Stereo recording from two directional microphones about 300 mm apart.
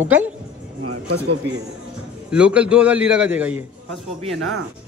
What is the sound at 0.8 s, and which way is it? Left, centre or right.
Speech, right.